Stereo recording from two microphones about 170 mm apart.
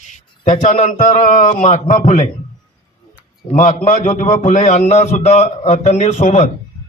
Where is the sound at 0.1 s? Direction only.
45° left (ahead or behind).